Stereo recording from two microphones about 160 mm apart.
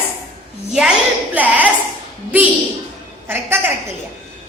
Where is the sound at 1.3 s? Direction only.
10° right (ahead or behind).